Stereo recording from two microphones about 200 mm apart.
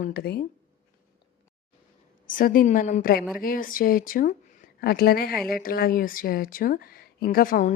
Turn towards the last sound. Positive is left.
turn(degrees=45)  # may be behind; listen again after turning